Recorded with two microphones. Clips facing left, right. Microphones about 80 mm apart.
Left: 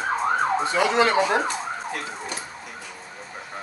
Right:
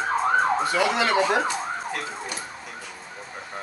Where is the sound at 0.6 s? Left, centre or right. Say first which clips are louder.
Left 2 dB; left.